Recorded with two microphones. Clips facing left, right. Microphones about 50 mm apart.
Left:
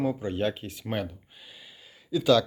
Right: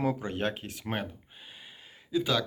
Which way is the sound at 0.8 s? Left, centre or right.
Right.